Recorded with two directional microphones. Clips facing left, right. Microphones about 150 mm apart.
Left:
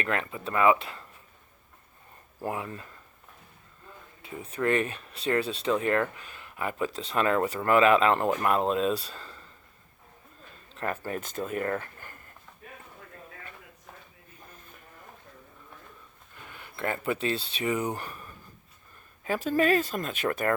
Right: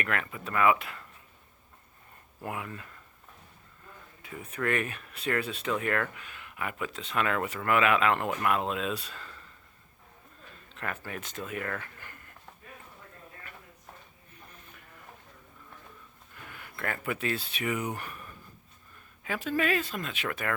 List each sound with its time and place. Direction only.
0.0 s speech: 25° left (ahead or behind)
2.4 s speech: 30° left (ahead or behind)
4.2 s speech: 25° left (ahead or behind)
10.8 s speech: 35° left (ahead or behind)
16.4 s speech: 25° left (ahead or behind)
19.2 s speech: 40° left (ahead or behind)